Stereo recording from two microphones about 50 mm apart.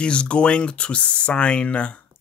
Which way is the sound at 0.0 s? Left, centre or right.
Left.